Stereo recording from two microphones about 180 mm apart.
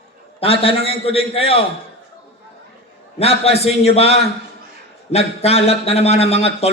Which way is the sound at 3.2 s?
35° left (ahead or behind).